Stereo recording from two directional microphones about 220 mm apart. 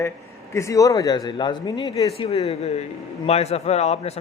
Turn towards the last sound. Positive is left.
turn(degrees=30)  # may be behind; listen again after turning